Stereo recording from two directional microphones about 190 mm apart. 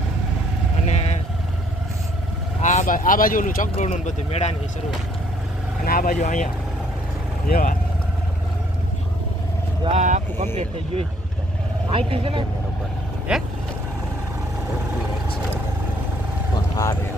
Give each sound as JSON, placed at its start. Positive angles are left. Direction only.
{"t": 0.9, "sound": "vehicle", "side_deg": 35}
{"t": 2.6, "sound": "speech", "side_deg": 40}
{"t": 5.8, "sound": "speech", "side_deg": 50}
{"t": 7.5, "sound": "speech", "side_deg": 45}
{"t": 9.8, "sound": "speech", "side_deg": -35}
{"t": 11.9, "sound": "speech", "side_deg": -30}
{"t": 13.3, "sound": "speech", "side_deg": -5}